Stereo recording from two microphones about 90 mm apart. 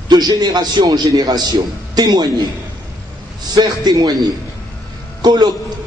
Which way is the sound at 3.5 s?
45° right (ahead or behind).